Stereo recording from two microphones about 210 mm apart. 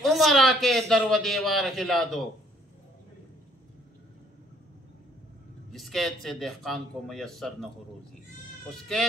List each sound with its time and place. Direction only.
0.0 s a man's voice: centre (ahead or behind)
5.7 s a man's voice: centre (ahead or behind)